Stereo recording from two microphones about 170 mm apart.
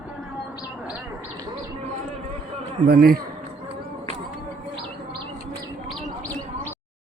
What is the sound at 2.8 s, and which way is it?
Speech, 65° right (ahead or behind).